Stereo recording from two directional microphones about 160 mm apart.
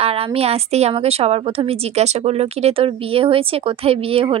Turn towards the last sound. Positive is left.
turn(degrees=-35)  # may be behind; listen again after turning